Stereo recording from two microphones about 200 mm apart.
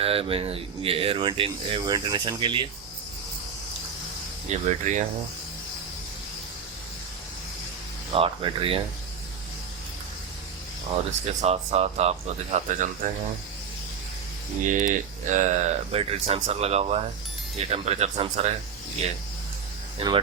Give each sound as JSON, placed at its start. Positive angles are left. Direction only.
{"t": 0.0, "sound": "speech", "side_deg": -30}
{"t": 4.4, "sound": "speech", "side_deg": -35}
{"t": 8.1, "sound": "speech", "side_deg": -30}
{"t": 11.3, "sound": "speech", "side_deg": -30}
{"t": 14.7, "sound": "speech", "side_deg": -40}